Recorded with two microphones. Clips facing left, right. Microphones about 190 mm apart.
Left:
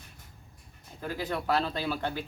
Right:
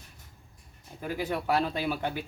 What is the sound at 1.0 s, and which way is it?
Speech, 10° right (ahead or behind).